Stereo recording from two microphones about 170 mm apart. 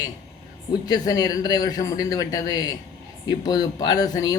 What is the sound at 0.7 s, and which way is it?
Speech, 25° left (ahead or behind).